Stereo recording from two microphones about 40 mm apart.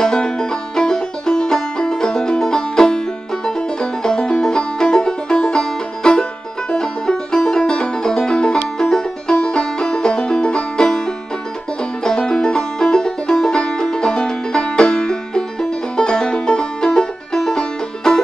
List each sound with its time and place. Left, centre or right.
0.0 s music: centre
12.0 s music: centre